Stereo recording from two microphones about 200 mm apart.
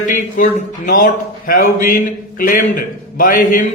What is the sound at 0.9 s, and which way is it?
A man's voice, 45° left (ahead or behind).